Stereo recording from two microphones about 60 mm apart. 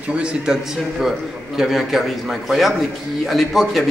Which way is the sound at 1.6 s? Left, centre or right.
Centre.